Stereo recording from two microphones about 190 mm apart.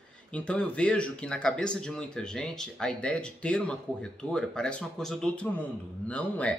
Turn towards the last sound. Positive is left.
turn(degrees=5)  # may be behind; listen again after turning